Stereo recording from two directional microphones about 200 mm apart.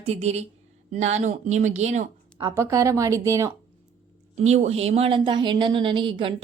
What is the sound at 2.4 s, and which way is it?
A woman's voice, 15° right (ahead or behind).